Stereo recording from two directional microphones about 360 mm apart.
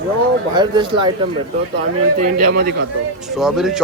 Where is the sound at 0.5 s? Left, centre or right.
Centre.